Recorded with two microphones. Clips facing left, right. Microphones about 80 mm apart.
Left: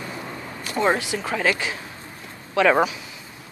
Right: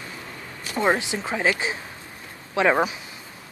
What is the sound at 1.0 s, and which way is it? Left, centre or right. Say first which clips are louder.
Speech: left 1 dB; right.